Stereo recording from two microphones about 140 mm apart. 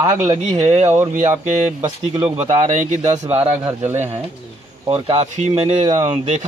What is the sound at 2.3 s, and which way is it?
Speech, 55° right (ahead or behind).